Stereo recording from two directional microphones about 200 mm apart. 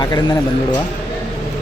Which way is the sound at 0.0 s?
20° left (ahead or behind).